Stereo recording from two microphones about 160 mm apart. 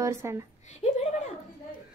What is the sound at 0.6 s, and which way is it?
Speech, 45° left (ahead or behind).